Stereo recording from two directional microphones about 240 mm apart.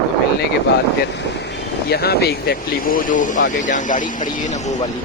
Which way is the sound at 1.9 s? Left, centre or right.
Left.